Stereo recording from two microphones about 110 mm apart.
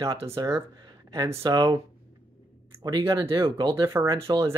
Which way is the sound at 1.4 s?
40° right (ahead or behind).